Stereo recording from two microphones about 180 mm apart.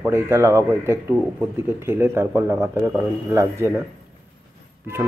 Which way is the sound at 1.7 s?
10° right (ahead or behind).